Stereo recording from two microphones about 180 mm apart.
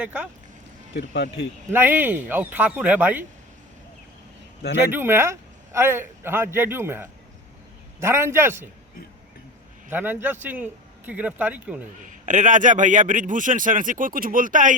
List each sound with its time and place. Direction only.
0.0 s a man's voice: 5° right (ahead or behind)
0.9 s speech: 70° left (ahead or behind)
1.7 s a man's voice: 10° right (ahead or behind)
4.9 s a man's voice: 10° right (ahead or behind)
9.9 s a man's voice: 10° right (ahead or behind)
12.0 s a man's voice: 45° right (ahead or behind)